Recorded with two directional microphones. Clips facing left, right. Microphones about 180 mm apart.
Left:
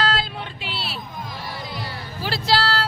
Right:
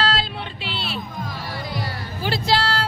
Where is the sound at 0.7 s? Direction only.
5° left (ahead or behind).